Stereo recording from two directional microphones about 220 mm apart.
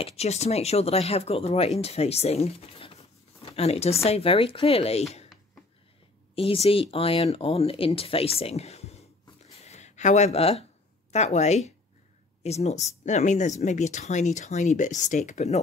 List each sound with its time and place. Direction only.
0.0 s speech: 30° left (ahead or behind)
6.3 s speech: 25° left (ahead or behind)
9.6 s a sound: 30° left (ahead or behind)
11.1 s speech: 30° left (ahead or behind)